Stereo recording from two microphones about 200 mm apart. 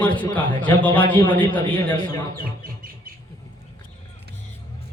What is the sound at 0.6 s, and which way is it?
Speech, 10° left (ahead or behind).